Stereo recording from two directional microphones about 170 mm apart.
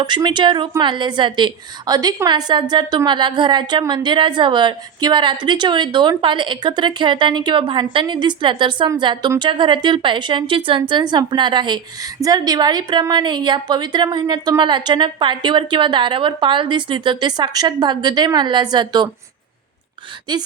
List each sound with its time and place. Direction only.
0.0 s a woman's voice: 25° right (ahead or behind)
20.3 s a woman's voice: 25° right (ahead or behind)